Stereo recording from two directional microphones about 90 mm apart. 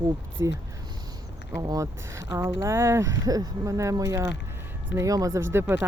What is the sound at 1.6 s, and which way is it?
Speech, 40° right (ahead or behind).